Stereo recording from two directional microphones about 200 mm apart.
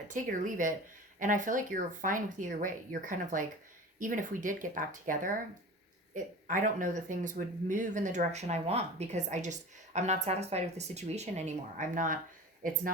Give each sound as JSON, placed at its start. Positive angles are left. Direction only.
{"t": 0.1, "sound": "speech", "side_deg": -40}